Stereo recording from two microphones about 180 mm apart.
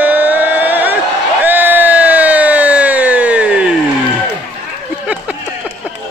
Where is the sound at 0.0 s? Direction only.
10° right (ahead or behind).